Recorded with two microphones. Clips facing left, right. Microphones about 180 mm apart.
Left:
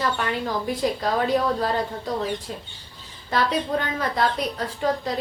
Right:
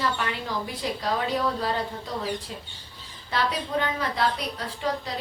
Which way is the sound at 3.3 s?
45° left (ahead or behind).